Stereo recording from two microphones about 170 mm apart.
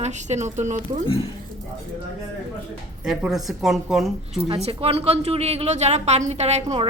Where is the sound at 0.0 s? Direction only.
45° right (ahead or behind).